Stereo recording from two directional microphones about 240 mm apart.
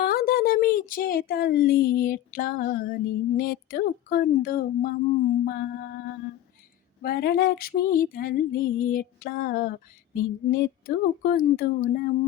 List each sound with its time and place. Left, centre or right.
0.0 s speech: left
5.5 s female singing: left